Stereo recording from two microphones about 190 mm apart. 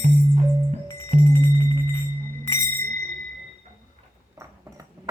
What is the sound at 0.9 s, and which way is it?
Music, 15° left (ahead or behind).